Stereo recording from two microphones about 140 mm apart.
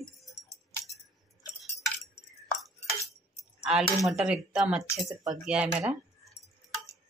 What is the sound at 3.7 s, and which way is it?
A woman's voice, centre (ahead or behind).